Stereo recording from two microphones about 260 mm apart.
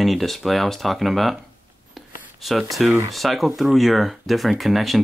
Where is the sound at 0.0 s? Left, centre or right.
Centre.